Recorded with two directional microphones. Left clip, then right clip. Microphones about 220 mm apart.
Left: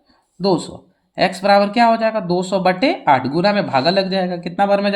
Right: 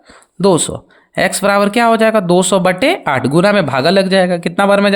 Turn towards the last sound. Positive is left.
turn(degrees=-45)  # may be behind; listen again after turning